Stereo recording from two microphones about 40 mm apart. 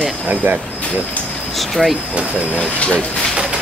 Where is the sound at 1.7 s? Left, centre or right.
Centre.